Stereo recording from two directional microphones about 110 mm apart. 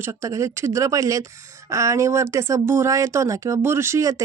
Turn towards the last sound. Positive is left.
turn(degrees=-25)  # may be behind; listen again after turning